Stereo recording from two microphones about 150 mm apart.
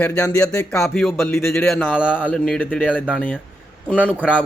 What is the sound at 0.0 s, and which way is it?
Speech, 10° left (ahead or behind).